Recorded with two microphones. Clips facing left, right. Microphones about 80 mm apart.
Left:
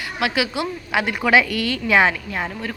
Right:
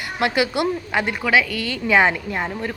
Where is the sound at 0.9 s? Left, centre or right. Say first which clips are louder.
Left 4 dB; centre.